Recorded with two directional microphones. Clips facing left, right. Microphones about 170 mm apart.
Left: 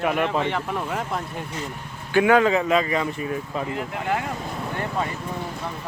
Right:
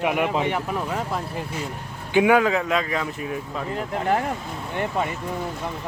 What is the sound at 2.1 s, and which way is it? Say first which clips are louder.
Speech: even; 15° right (ahead or behind).